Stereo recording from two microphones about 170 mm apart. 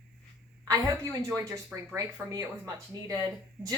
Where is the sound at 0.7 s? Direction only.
20° right (ahead or behind).